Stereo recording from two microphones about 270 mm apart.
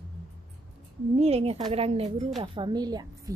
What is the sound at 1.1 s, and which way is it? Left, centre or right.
A woman's voice, right.